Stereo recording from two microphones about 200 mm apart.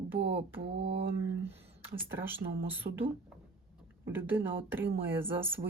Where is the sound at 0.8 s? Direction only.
60° right (ahead or behind).